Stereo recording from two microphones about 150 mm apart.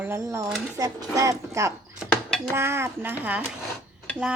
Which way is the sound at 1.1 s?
20° right (ahead or behind).